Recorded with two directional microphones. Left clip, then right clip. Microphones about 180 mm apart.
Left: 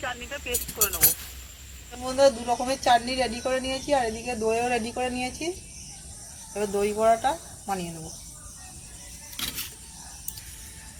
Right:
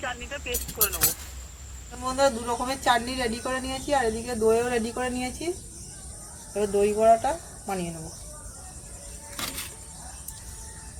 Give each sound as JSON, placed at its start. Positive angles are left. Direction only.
{"t": 0.0, "sound": "speech", "side_deg": 0}
{"t": 2.0, "sound": "speech", "side_deg": 5}
{"t": 6.5, "sound": "speech", "side_deg": 0}